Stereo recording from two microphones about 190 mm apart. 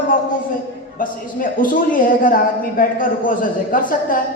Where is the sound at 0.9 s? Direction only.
45° left (ahead or behind).